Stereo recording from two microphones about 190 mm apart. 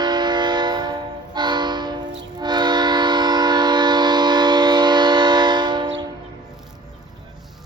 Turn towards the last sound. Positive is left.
turn(degrees=-25)  # may be behind; listen again after turning